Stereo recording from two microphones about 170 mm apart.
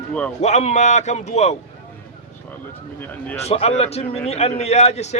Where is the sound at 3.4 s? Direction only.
40° left (ahead or behind).